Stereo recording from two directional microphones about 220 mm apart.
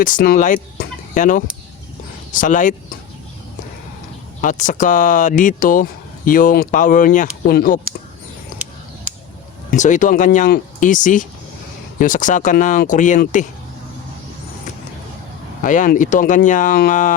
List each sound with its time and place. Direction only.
0.0 s speech: 40° left (ahead or behind)
4.4 s speech: 35° left (ahead or behind)
9.7 s speech: 35° left (ahead or behind)
15.6 s speech: 35° left (ahead or behind)